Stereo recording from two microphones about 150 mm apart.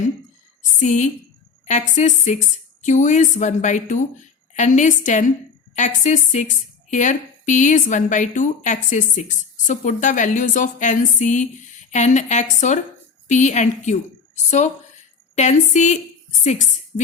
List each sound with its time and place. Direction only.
0.8 s a woman's voice: 50° left (ahead or behind)